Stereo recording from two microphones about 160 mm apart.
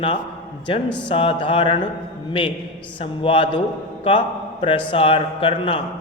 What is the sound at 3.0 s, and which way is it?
A man's voice, 35° left (ahead or behind).